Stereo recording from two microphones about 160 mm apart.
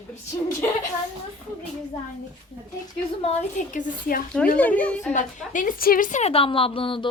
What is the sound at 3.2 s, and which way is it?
Speech, 40° left (ahead or behind).